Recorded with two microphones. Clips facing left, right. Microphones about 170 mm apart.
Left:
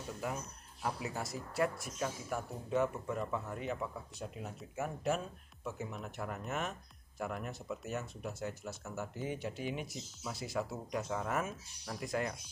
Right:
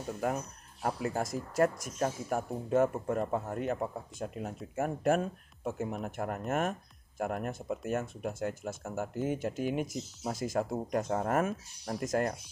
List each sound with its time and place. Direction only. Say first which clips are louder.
0.8 s speech: right 6 dB; 50° right (ahead or behind)